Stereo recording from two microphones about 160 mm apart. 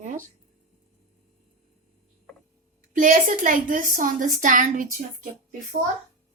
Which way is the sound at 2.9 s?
55° right (ahead or behind).